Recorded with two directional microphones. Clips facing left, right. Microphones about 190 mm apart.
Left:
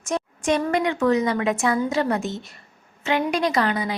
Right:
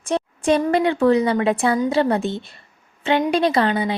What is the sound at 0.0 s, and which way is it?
A woman's voice, 30° right (ahead or behind).